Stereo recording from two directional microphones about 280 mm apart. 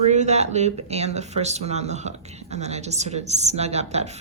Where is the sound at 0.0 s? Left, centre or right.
Right.